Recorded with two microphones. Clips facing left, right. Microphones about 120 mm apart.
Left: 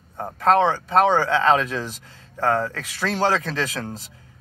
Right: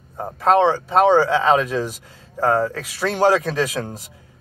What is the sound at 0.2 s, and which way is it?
Speech, 5° right (ahead or behind).